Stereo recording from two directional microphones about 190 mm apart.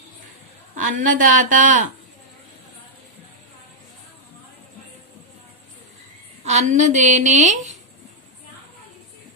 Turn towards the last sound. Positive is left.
turn(degrees=-40)  # may be behind; listen again after turning